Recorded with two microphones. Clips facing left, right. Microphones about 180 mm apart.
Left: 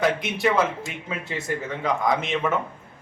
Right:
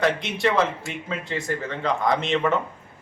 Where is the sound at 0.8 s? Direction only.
15° left (ahead or behind).